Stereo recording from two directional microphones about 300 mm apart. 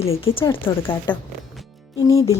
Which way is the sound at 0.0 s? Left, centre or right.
Centre.